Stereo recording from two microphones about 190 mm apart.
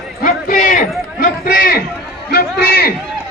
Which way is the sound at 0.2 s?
45° left (ahead or behind).